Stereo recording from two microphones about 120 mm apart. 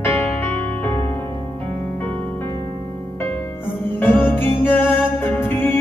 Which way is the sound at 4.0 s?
15° left (ahead or behind).